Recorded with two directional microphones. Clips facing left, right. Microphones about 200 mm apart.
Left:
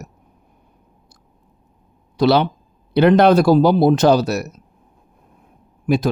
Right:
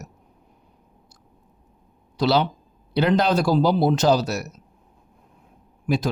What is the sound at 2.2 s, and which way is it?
Speech, 60° left (ahead or behind).